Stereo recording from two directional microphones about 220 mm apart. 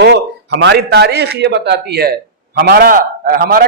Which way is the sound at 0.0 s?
50° right (ahead or behind).